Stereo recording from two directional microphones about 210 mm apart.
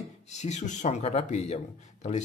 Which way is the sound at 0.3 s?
35° left (ahead or behind).